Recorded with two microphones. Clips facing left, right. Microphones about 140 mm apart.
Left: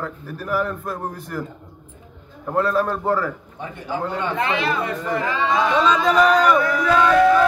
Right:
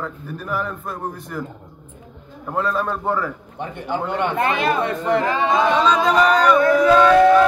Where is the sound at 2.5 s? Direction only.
5° left (ahead or behind).